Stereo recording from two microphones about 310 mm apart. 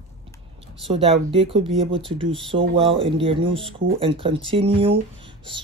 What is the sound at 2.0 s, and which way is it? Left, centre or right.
Speech, centre.